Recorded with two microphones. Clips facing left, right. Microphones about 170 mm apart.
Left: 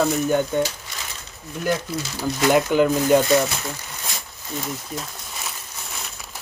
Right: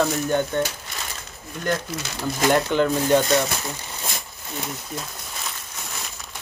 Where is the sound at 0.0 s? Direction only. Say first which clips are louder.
Left 2 dB; 5° left (ahead or behind).